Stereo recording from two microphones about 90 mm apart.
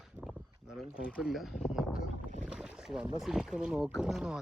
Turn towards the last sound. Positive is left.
turn(degrees=-10)  # may be behind; listen again after turning